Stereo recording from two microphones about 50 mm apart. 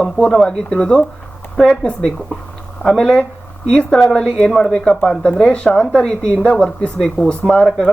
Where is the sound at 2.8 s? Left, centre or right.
Centre.